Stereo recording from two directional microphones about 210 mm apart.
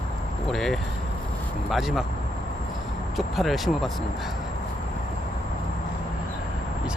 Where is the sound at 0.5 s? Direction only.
Centre (ahead or behind).